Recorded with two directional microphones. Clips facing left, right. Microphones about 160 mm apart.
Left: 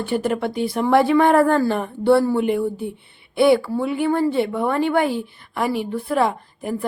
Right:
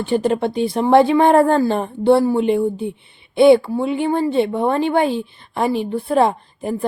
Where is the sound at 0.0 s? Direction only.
25° right (ahead or behind).